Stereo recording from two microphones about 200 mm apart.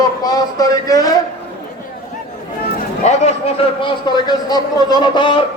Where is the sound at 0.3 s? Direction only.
20° left (ahead or behind).